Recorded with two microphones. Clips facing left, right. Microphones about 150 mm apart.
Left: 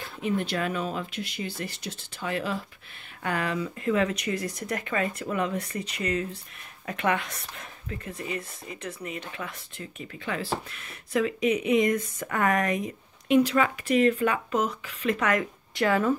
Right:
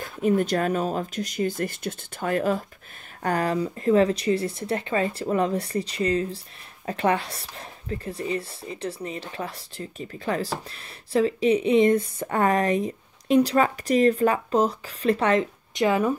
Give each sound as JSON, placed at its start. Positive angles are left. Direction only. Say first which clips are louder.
{"t": 0.0, "sound": "speech", "louder": "right 6 dB", "side_deg": -45}